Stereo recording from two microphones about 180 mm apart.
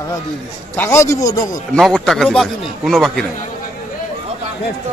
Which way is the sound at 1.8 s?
Centre (ahead or behind).